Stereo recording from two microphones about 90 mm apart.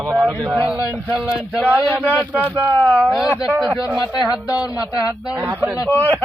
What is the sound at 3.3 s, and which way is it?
Speech, 15° right (ahead or behind).